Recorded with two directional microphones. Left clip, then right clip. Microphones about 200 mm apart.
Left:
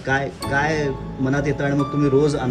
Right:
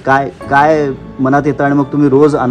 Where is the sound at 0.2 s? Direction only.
Centre (ahead or behind).